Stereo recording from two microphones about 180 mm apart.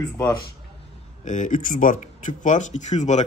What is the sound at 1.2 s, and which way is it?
Speech, 45° left (ahead or behind).